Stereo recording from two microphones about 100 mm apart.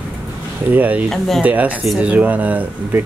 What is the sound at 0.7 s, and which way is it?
Speech, 15° right (ahead or behind).